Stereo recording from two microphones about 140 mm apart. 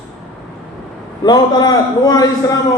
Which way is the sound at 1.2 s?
30° left (ahead or behind).